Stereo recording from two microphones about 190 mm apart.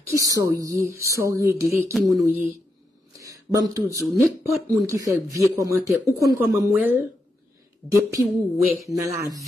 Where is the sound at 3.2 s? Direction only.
20° right (ahead or behind).